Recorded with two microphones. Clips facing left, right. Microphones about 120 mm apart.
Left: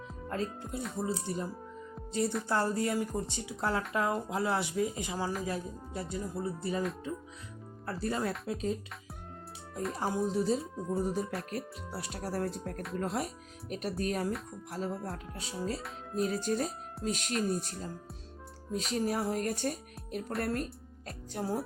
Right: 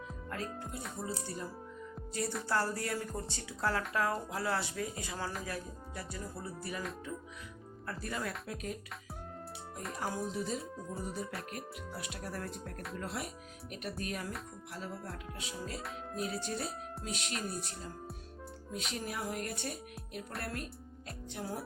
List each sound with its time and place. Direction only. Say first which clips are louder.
0.3 s speech: left 6 dB; 25° left (ahead or behind)
7.9 s speech: left 6 dB; 30° left (ahead or behind)
9.9 s music: left 5 dB; 25° left (ahead or behind)
16.1 s speech: left 8 dB; 40° left (ahead or behind)
17.5 s music: left 7 dB; 40° left (ahead or behind)
18.9 s music: left 8 dB; 35° left (ahead or behind)
21.1 s speech: left 6 dB; 35° left (ahead or behind)